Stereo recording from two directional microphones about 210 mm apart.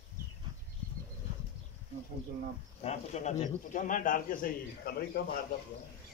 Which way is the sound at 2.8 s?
30° left (ahead or behind).